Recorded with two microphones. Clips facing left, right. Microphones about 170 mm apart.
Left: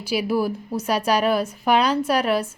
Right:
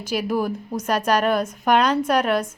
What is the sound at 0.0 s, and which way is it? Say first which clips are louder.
A woman's voice: left 1 dB; 10° left (ahead or behind).